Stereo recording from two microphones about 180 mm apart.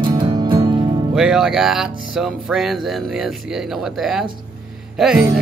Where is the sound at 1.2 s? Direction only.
5° right (ahead or behind).